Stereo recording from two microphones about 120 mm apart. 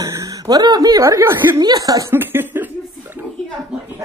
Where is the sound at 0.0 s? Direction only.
30° right (ahead or behind).